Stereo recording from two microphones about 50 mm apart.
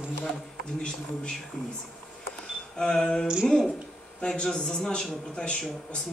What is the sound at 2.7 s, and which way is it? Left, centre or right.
A man's voice, centre.